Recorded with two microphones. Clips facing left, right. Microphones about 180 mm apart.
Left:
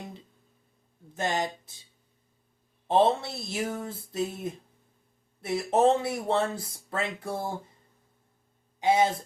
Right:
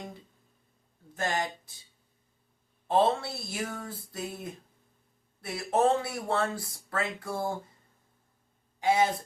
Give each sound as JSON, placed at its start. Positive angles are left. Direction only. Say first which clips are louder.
{"t": 1.1, "sound": "speech", "louder": "left 2 dB", "side_deg": 20}
{"t": 2.8, "sound": "speech", "louder": "left 2 dB", "side_deg": 20}
{"t": 8.8, "sound": "speech", "louder": "left 2 dB", "side_deg": 20}